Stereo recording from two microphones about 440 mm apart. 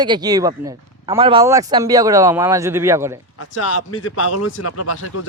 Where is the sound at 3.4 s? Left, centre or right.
Left.